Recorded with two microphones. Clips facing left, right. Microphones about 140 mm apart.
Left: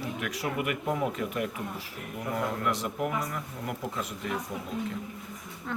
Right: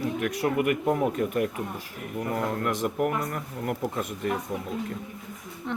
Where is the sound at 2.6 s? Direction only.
50° right (ahead or behind).